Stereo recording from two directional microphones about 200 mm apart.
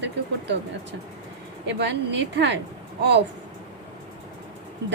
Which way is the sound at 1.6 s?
60° right (ahead or behind).